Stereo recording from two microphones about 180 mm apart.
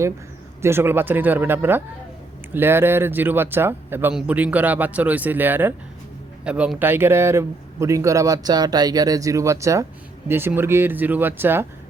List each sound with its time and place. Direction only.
0.6 s a man's voice: 15° right (ahead or behind)